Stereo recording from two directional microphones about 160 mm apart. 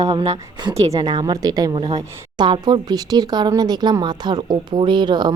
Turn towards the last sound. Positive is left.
turn(degrees=-25)  # may be behind; listen again after turning